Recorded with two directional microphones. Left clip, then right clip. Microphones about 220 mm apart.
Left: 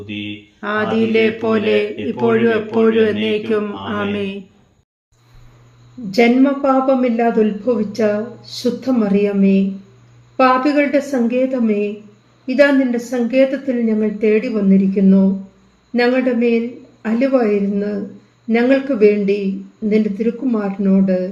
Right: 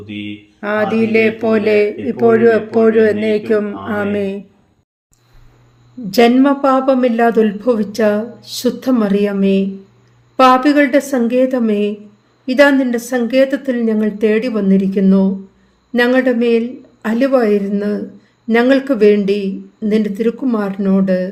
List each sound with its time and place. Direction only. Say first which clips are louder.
0.6 s speech: right 2 dB; 25° right (ahead or behind)
6.1 s speech: right 3 dB; 50° right (ahead or behind)